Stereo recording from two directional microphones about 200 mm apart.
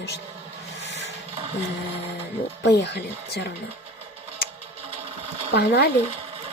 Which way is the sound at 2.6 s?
60° left (ahead or behind).